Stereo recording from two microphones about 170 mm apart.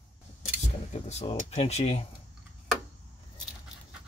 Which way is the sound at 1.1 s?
40° left (ahead or behind).